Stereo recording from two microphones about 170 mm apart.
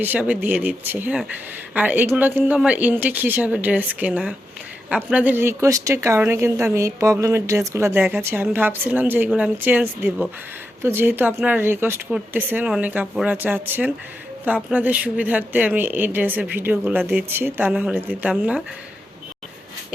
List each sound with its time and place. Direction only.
0.0 s a woman's voice: 10° right (ahead or behind)